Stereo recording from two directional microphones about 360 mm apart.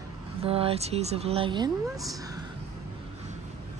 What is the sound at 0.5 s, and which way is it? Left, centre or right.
Speech, centre.